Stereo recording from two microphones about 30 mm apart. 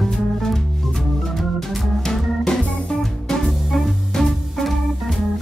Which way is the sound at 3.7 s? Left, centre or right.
Centre.